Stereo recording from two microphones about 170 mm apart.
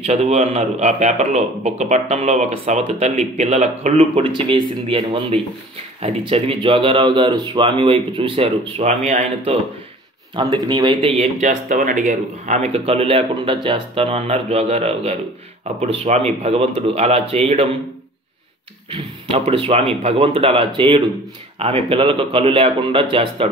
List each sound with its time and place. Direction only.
0.0 s a man's voice: 40° right (ahead or behind)
10.3 s a man's voice: 25° right (ahead or behind)
18.9 s a man's voice: 35° right (ahead or behind)